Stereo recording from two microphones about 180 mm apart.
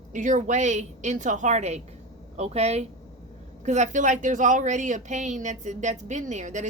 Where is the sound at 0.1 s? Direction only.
45° right (ahead or behind).